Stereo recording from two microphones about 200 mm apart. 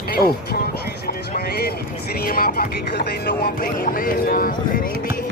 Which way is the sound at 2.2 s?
45° left (ahead or behind).